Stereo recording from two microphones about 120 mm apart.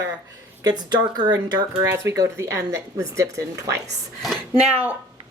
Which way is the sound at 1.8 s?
25° right (ahead or behind).